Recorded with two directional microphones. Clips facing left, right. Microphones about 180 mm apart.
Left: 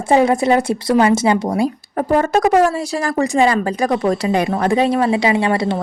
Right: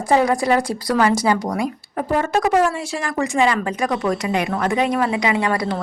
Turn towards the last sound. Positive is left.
turn(degrees=25)  # may be behind; listen again after turning